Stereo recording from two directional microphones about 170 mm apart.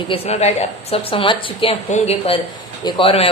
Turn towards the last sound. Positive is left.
turn(degrees=35)  # may be behind; listen again after turning